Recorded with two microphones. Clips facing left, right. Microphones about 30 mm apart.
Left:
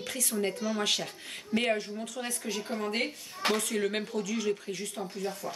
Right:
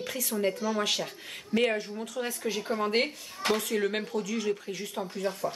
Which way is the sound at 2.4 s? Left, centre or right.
Centre.